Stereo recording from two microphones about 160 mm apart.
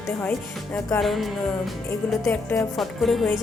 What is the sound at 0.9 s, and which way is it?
A woman's voice, centre (ahead or behind).